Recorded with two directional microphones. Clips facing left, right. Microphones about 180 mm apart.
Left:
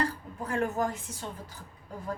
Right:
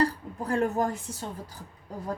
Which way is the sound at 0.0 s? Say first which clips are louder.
Right 5 dB; 35° right (ahead or behind).